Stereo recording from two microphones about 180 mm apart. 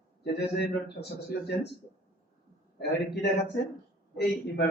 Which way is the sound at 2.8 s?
65° left (ahead or behind).